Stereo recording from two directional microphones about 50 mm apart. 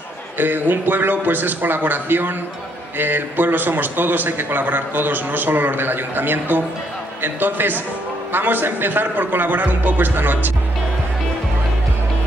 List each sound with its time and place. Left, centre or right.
0.4 s a man's voice: right